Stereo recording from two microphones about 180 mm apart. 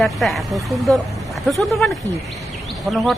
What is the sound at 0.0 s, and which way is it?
Speech, centre (ahead or behind).